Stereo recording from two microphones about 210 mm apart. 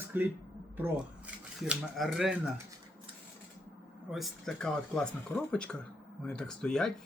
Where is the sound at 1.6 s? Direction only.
Centre (ahead or behind).